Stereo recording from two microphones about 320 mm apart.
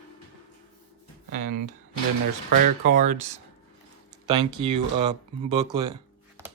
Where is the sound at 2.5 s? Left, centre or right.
Right.